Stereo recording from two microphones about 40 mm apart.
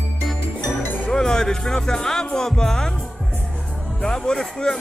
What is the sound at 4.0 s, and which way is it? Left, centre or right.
Speech, centre.